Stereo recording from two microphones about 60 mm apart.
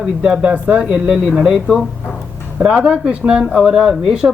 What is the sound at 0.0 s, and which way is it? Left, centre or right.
Speech, centre.